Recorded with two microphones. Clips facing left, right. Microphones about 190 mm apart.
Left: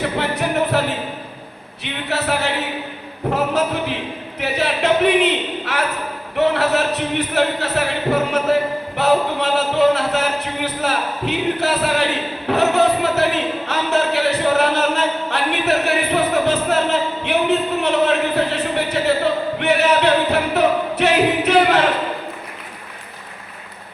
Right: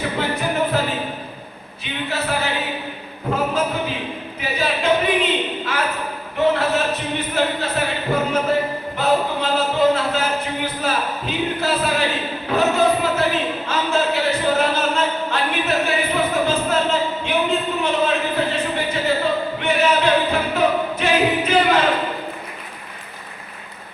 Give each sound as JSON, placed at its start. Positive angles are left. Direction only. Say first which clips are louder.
{"t": 0.2, "sound": "music", "louder": "even", "side_deg": 70}
{"t": 1.8, "sound": "speech", "louder": "left 2 dB", "side_deg": 75}
{"t": 12.5, "sound": "a sound", "louder": "left 2 dB", "side_deg": 70}